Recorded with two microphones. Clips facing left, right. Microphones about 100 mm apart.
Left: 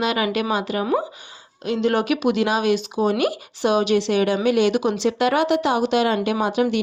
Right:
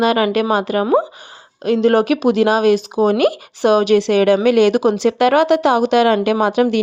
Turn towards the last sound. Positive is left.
turn(degrees=-55)  # may be behind; listen again after turning